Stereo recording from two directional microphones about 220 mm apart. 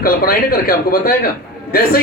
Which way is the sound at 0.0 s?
40° left (ahead or behind).